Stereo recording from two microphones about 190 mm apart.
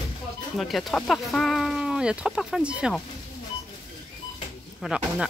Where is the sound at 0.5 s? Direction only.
Centre (ahead or behind).